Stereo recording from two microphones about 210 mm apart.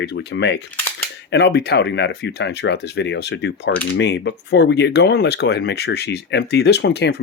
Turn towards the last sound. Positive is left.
turn(degrees=55)  # may be behind; listen again after turning